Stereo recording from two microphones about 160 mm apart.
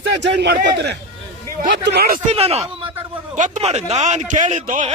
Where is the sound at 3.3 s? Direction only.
50° right (ahead or behind).